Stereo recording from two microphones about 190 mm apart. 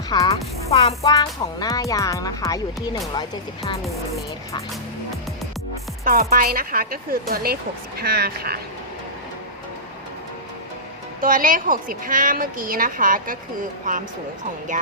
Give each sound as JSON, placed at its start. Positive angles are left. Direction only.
{"t": 0.3, "sound": "speech", "side_deg": 30}
{"t": 1.0, "sound": "speech", "side_deg": 20}
{"t": 6.1, "sound": "a woman's voice", "side_deg": -50}
{"t": 11.2, "sound": "a woman's voice", "side_deg": -45}